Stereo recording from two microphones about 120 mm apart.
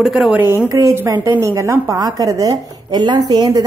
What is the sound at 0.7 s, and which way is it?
A woman's voice, 25° right (ahead or behind).